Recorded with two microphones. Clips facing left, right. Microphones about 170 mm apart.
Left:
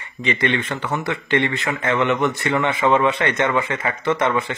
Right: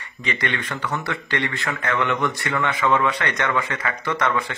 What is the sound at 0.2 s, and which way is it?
Speech, 25° left (ahead or behind).